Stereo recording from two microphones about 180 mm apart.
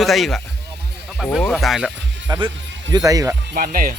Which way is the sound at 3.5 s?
50° right (ahead or behind).